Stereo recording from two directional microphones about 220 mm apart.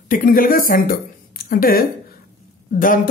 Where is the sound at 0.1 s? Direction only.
40° left (ahead or behind).